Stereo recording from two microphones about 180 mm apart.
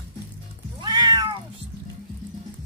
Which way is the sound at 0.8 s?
25° right (ahead or behind).